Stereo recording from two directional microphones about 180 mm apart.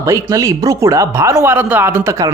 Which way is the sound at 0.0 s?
20° right (ahead or behind).